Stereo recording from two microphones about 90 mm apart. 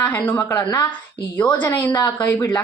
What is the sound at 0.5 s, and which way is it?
Speech, 50° left (ahead or behind).